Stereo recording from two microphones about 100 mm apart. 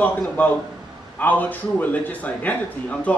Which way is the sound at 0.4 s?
15° left (ahead or behind).